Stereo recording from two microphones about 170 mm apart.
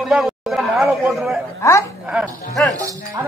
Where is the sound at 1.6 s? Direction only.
20° left (ahead or behind).